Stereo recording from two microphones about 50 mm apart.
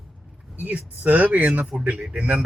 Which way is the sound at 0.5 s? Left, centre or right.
Right.